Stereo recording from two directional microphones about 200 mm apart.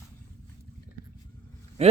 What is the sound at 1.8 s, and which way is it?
Speech, 30° right (ahead or behind).